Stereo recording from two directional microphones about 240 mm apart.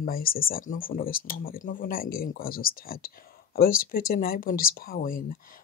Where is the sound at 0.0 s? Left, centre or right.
Left.